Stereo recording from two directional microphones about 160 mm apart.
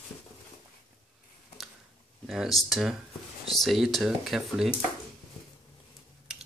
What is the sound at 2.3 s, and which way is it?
Speech, centre (ahead or behind).